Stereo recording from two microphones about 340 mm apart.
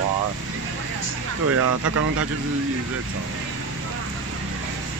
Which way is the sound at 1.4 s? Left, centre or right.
Right.